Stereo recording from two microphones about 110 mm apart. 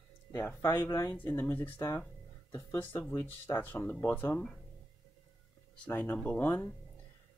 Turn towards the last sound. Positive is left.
turn(degrees=20)  # may be behind; listen again after turning